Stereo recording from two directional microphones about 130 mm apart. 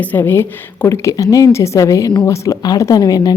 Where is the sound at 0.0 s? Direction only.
15° left (ahead or behind).